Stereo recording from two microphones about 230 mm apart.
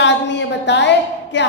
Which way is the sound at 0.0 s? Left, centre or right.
Left.